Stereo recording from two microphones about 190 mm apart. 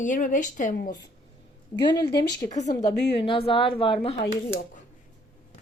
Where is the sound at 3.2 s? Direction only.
30° left (ahead or behind).